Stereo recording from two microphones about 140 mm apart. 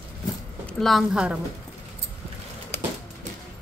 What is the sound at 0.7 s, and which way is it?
Speech, centre (ahead or behind).